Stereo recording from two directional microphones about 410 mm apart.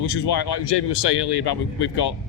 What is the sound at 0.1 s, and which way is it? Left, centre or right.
Speech, left.